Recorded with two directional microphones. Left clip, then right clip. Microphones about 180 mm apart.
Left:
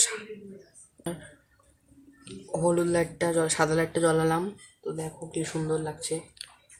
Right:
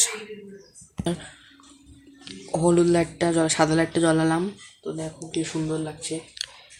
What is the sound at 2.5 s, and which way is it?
Speech, 45° right (ahead or behind).